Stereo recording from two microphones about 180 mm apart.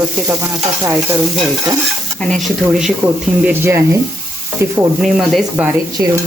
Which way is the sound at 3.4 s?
10° right (ahead or behind).